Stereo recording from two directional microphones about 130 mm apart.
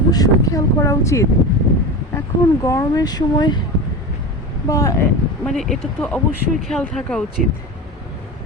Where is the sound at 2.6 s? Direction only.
25° left (ahead or behind).